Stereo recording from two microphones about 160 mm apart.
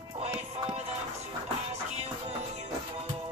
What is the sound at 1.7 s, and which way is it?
Music, 40° right (ahead or behind).